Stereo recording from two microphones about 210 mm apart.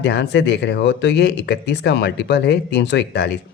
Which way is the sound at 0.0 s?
55° left (ahead or behind).